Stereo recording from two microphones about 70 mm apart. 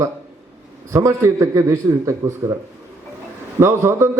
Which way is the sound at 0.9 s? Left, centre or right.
Right.